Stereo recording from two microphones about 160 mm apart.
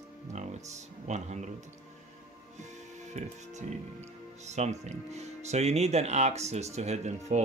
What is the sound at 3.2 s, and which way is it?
Speech, 45° right (ahead or behind).